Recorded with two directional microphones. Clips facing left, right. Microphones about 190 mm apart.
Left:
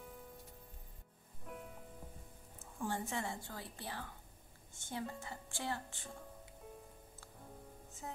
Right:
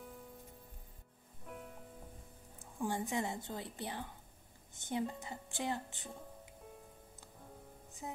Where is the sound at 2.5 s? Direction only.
15° right (ahead or behind).